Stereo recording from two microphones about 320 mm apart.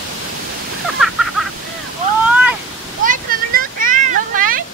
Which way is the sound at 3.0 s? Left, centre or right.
Right.